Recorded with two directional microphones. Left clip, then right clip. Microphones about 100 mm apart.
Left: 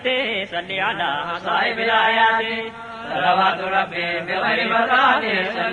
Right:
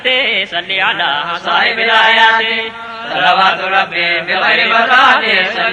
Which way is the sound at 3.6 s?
50° right (ahead or behind).